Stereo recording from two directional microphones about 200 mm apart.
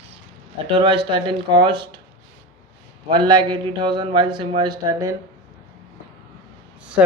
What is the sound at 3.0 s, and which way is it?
Speech, 25° right (ahead or behind).